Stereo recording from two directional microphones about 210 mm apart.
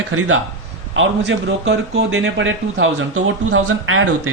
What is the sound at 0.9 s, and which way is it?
A man's voice, 65° right (ahead or behind).